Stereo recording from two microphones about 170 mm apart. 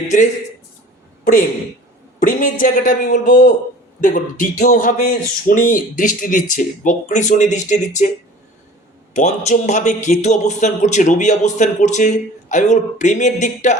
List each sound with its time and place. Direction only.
1.2 s a man's voice: 55° left (ahead or behind)
9.1 s a man's voice: 45° left (ahead or behind)